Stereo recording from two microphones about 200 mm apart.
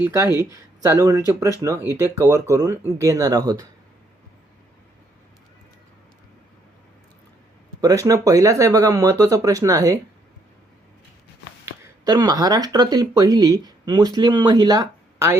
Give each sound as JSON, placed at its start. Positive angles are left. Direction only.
{"t": 0.0, "sound": "speech", "side_deg": -15}
{"t": 0.3, "sound": "speech", "side_deg": 20}
{"t": 0.5, "sound": "speech", "side_deg": -15}
{"t": 7.8, "sound": "speech", "side_deg": -15}
{"t": 11.6, "sound": "speech", "side_deg": -20}